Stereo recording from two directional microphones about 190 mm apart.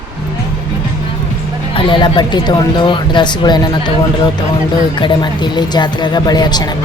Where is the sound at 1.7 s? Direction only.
25° left (ahead or behind).